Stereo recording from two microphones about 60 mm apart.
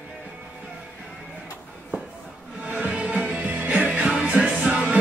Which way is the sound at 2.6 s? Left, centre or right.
Right.